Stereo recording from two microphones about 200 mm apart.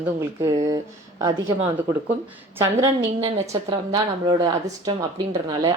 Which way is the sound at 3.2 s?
20° right (ahead or behind).